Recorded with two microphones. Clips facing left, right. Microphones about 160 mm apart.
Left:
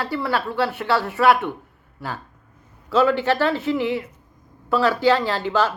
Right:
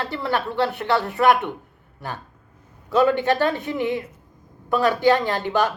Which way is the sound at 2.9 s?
15° right (ahead or behind).